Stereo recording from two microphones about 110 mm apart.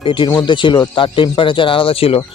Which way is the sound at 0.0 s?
50° left (ahead or behind).